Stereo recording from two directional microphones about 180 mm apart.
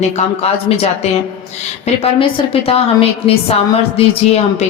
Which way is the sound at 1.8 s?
30° left (ahead or behind).